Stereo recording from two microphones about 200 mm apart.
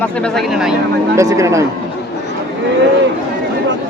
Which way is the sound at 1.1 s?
15° right (ahead or behind).